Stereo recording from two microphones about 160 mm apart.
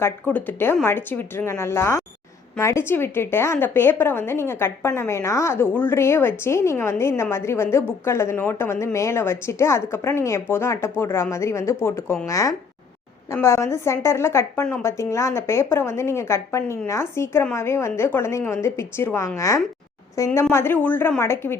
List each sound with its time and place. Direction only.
0.0 s a woman's voice: 10° left (ahead or behind)